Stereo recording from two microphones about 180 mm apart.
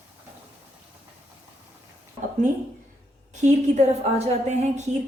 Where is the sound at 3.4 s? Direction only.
40° right (ahead or behind).